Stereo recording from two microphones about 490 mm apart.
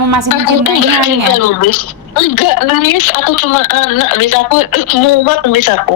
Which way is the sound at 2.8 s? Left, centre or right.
Left.